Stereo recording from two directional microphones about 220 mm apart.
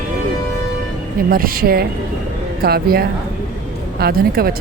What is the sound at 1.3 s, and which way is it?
A woman's voice, 40° right (ahead or behind).